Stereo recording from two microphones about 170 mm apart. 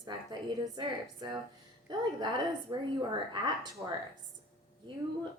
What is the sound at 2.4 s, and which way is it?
A woman's voice, 25° right (ahead or behind).